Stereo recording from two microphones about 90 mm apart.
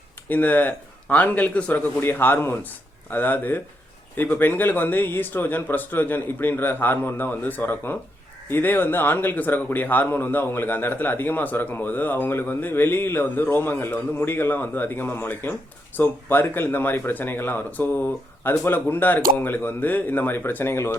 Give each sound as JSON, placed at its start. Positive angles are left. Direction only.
{"t": 0.3, "sound": "a man's voice", "side_deg": 20}